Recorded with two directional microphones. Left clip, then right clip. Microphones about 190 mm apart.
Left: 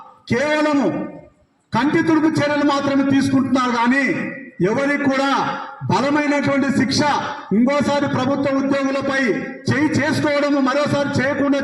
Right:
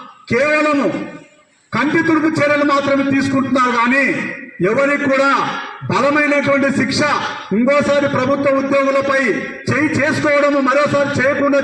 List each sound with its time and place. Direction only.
0.3 s a man's voice: 35° left (ahead or behind)